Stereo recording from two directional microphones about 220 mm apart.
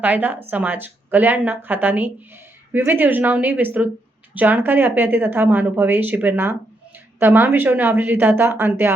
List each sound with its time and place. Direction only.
0.0 s a woman's voice: 5° right (ahead or behind)